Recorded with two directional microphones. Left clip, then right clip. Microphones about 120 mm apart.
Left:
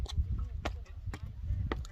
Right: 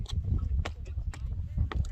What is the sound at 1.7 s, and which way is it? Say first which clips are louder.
Rowboat: left 2 dB; 60° right (ahead or behind).